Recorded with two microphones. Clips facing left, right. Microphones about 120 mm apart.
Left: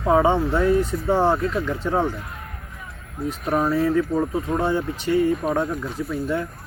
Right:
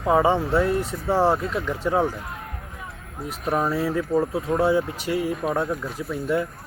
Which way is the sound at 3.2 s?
5° right (ahead or behind).